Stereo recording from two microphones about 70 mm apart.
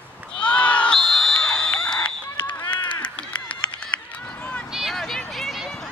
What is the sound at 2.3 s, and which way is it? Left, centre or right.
Run, left.